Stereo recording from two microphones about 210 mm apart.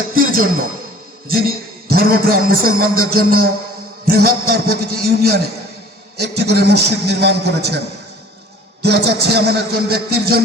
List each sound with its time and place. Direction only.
0.1 s a man's voice: 40° right (ahead or behind)
8.8 s a man's voice: 50° right (ahead or behind)